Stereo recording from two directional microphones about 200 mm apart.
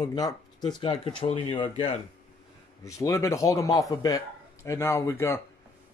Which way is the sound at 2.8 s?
15° left (ahead or behind).